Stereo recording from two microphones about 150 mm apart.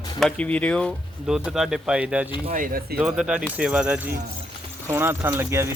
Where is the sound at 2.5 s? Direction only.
70° right (ahead or behind).